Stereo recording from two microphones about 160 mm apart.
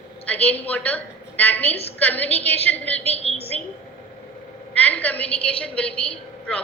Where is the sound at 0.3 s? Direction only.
10° left (ahead or behind).